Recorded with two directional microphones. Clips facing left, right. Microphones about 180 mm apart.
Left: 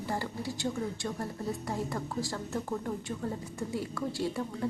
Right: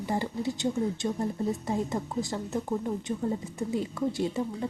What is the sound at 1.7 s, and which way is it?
A woman's voice, 20° right (ahead or behind).